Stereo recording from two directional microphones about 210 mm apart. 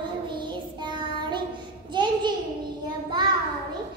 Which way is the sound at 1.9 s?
20° right (ahead or behind).